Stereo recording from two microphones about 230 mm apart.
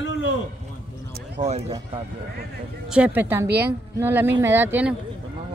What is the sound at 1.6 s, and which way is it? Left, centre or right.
Speech, centre.